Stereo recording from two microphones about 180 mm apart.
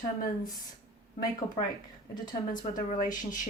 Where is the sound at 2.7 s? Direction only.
45° left (ahead or behind).